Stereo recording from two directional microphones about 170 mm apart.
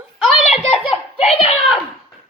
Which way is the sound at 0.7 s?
35° left (ahead or behind).